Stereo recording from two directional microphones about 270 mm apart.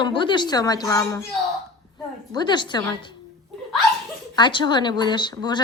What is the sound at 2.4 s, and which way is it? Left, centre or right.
Speech, centre.